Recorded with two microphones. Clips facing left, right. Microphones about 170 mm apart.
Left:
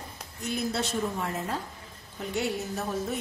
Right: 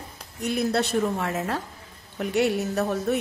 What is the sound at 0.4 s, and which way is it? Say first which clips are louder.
A woman's voice: right 6 dB; 65° right (ahead or behind).